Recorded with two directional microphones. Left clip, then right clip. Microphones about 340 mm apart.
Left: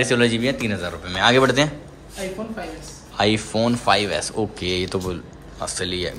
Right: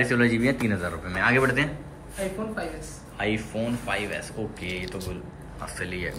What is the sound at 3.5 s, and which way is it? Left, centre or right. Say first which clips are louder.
Speech: left 10 dB; left.